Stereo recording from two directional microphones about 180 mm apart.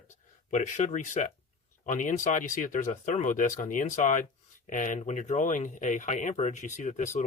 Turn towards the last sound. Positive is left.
turn(degrees=40)  # may be behind; listen again after turning